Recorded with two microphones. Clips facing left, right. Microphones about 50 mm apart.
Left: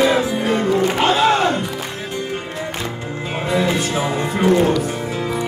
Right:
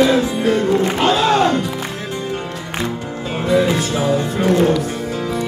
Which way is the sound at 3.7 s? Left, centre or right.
Left.